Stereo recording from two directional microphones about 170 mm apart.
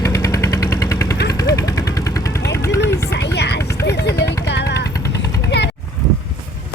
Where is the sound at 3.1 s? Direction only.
75° left (ahead or behind).